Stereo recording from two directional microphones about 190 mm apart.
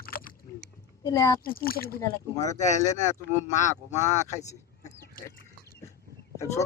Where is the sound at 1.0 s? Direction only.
20° left (ahead or behind).